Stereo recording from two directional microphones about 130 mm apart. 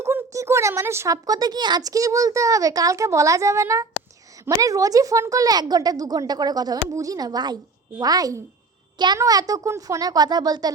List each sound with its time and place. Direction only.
0.0 s speech: 20° right (ahead or behind)